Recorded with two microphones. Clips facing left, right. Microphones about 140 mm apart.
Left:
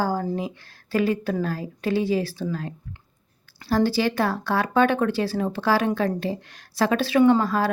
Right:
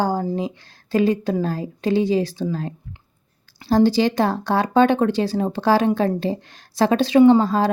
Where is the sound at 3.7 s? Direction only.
25° right (ahead or behind).